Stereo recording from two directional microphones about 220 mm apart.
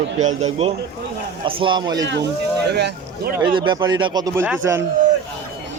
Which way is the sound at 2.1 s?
50° right (ahead or behind).